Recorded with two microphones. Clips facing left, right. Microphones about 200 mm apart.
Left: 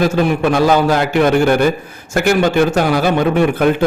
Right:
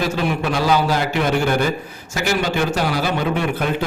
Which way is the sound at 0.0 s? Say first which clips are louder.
Left 7 dB; 50° left (ahead or behind).